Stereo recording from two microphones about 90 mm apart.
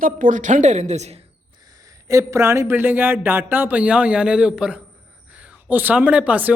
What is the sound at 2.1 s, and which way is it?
Speech, 35° right (ahead or behind).